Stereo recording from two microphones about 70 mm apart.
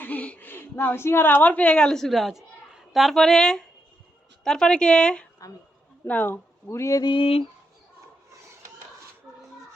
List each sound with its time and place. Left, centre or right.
0.0 s a sound: left
1.0 s a woman's voice: left; by 5.3 s centre
6.1 s speech: left